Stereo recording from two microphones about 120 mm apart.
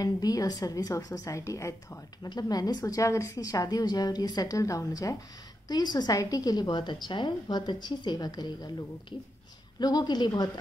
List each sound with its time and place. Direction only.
0.0 s a woman's voice: 30° left (ahead or behind)